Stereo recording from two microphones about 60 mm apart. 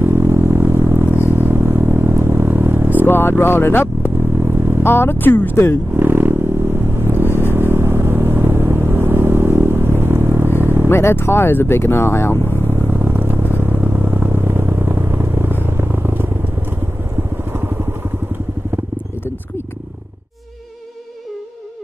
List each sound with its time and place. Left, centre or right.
0.0 s vehicle: right
3.1 s vehicle: left
4.4 s vehicle: right
4.8 s speech: left
5.9 s vehicle: right
10.9 s speech: left
12.6 s vehicle: right
17.5 s vehicle: right